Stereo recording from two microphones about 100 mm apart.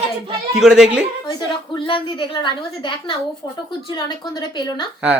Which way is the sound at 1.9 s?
55° left (ahead or behind).